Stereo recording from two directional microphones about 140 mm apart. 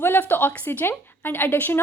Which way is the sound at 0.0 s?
15° left (ahead or behind).